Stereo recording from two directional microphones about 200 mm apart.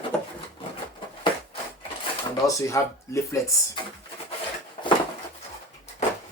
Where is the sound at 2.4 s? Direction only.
15° left (ahead or behind).